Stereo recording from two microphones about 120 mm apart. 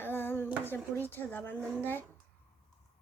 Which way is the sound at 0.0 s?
20° left (ahead or behind).